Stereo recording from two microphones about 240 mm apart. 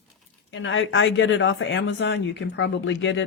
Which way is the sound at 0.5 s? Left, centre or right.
Left.